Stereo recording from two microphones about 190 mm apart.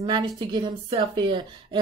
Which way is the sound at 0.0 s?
25° right (ahead or behind).